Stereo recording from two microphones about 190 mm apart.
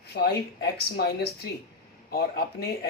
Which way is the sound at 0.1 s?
60° left (ahead or behind).